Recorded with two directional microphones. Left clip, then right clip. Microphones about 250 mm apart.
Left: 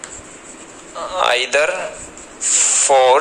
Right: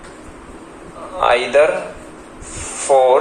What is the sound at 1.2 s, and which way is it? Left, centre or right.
Speech, left.